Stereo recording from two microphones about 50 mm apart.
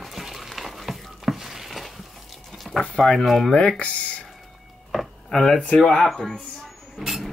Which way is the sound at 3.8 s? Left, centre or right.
Left.